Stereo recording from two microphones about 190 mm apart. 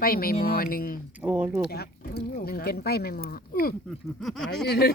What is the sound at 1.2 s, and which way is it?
Speech, 10° right (ahead or behind).